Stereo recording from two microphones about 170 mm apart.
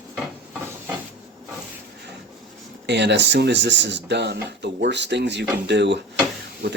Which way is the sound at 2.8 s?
90° right.